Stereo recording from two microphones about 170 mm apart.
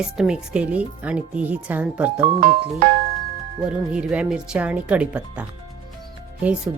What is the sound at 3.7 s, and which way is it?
Speech, 5° right (ahead or behind).